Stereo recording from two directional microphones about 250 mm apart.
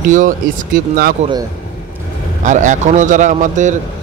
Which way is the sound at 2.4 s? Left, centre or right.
Right.